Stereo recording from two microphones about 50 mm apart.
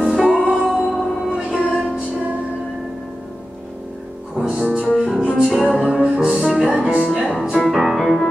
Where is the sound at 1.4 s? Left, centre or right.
Centre.